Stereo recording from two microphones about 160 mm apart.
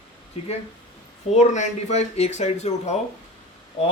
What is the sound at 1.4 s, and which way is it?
Speech, 45° left (ahead or behind).